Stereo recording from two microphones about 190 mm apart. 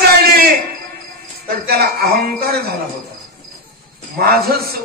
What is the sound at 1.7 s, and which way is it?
A man's voice, 55° right (ahead or behind).